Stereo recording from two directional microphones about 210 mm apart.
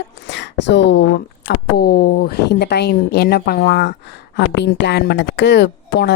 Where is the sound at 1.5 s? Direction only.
45° left (ahead or behind).